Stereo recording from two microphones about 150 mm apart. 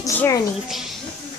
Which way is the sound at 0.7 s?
Centre (ahead or behind).